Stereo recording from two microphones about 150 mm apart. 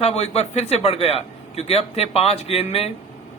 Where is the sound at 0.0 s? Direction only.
45° left (ahead or behind).